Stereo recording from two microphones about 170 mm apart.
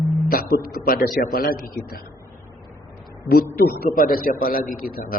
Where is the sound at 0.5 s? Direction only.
55° left (ahead or behind).